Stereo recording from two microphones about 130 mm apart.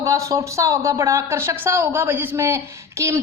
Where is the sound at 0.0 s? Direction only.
25° right (ahead or behind).